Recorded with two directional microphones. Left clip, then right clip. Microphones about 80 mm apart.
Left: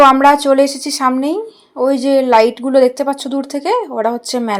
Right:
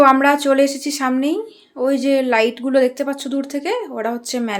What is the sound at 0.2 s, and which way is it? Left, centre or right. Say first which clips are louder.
A woman's voice: left 5 dB; left.